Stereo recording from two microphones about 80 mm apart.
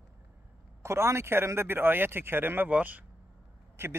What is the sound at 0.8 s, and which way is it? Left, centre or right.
Speech, right.